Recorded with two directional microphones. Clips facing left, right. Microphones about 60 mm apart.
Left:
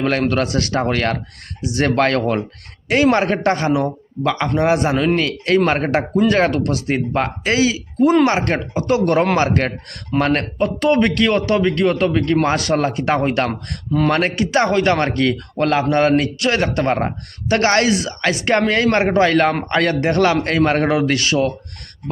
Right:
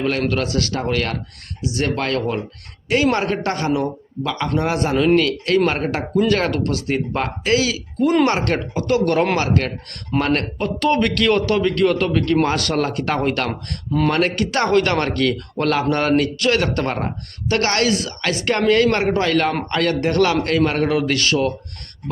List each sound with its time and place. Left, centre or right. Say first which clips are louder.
0.3 s speech: left 2 dB; left
2.0 s speech: left 5 dB; left
2.9 s speech: left 3 dB; left
6.2 s speech: left 4 dB; left
8.1 s speech: right 1 dB; centre
9.4 s speech: left 3 dB; left
10.6 s speech: left 4 dB; centre; by 14.3 s left
14.5 s speech: left 2 dB; centre